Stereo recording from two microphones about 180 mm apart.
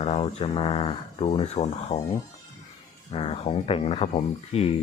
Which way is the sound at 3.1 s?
30° left (ahead or behind).